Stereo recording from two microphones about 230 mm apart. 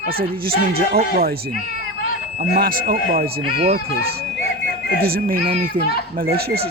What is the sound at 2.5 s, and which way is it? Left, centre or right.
Speech, right.